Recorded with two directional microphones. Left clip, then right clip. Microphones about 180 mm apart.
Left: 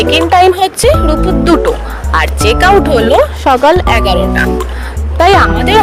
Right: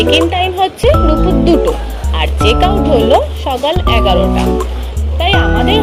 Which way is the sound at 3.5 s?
45° left (ahead or behind).